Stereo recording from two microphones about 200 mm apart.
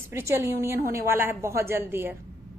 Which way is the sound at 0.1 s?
15° right (ahead or behind).